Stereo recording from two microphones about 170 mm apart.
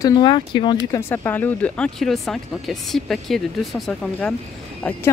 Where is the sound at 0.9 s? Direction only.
10° left (ahead or behind).